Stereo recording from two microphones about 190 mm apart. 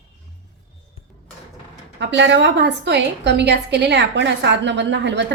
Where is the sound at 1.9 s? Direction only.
65° right (ahead or behind).